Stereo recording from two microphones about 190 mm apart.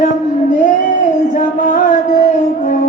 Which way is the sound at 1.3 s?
40° left (ahead or behind).